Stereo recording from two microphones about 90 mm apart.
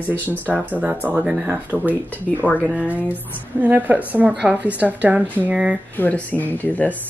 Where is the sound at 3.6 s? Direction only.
20° right (ahead or behind).